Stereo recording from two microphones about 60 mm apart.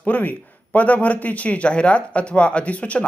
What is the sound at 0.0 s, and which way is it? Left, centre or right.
Speech, left.